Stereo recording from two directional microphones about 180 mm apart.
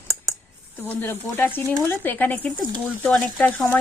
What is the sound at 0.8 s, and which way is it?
A woman's voice, 10° left (ahead or behind).